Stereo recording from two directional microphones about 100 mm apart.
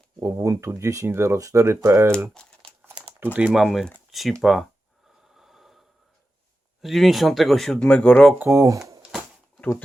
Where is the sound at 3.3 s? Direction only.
10° right (ahead or behind).